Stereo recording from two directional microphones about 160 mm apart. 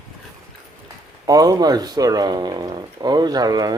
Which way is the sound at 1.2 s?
20° right (ahead or behind).